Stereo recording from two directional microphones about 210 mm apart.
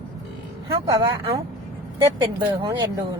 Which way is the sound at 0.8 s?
15° right (ahead or behind).